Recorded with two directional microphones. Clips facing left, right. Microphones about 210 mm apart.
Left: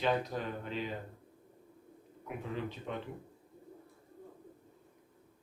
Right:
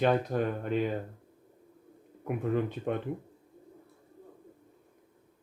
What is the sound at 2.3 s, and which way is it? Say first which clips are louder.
Speech: right 9 dB; 55° right (ahead or behind).